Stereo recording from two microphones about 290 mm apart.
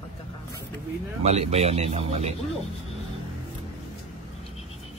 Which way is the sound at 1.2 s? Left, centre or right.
Right.